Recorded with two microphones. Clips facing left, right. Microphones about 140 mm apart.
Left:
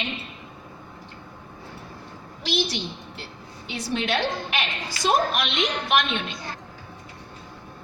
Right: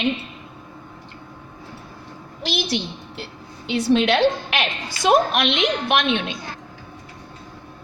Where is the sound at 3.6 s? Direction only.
75° right (ahead or behind).